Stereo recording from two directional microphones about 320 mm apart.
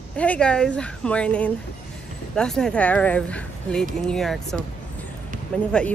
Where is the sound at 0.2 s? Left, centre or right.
Centre.